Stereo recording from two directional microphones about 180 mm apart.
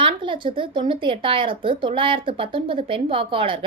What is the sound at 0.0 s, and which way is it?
A woman's voice, 30° right (ahead or behind).